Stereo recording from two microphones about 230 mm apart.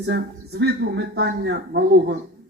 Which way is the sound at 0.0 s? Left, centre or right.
Right.